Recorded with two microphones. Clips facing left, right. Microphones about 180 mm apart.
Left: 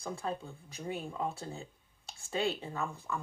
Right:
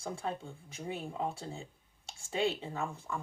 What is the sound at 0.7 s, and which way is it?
Speech, 25° right (ahead or behind).